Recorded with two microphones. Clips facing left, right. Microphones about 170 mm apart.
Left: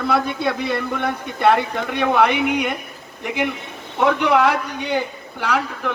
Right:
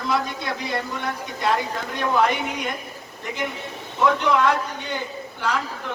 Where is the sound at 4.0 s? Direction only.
60° left (ahead or behind).